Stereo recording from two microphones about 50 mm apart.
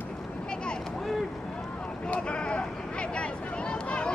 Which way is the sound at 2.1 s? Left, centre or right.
Left.